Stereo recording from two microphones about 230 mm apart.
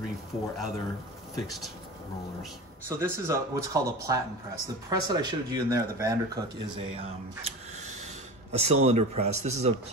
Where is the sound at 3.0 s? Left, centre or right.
Centre.